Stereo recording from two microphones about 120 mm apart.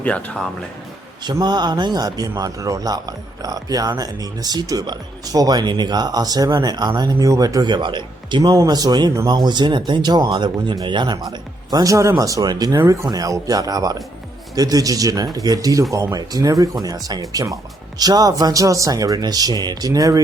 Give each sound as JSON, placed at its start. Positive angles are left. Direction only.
{"t": 0.0, "sound": "speech", "side_deg": 10}
{"t": 1.2, "sound": "speech", "side_deg": -35}
{"t": 12.8, "sound": "speech", "side_deg": -25}